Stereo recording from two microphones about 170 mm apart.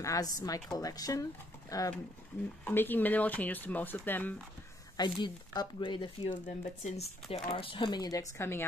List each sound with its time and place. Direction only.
0.0 s speech: 20° left (ahead or behind)
4.9 s speech: 25° left (ahead or behind)
6.4 s speech: 40° left (ahead or behind); by 8.6 s 15° left (ahead or behind)